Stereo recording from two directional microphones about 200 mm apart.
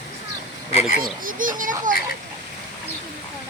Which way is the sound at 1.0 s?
45° right (ahead or behind).